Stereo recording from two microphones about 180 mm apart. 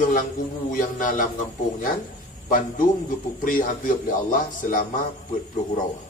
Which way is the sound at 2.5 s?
50° left (ahead or behind).